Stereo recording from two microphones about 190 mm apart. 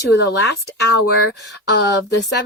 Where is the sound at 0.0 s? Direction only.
65° left (ahead or behind).